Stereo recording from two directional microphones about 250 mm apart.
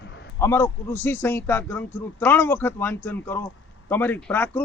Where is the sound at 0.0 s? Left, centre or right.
Left.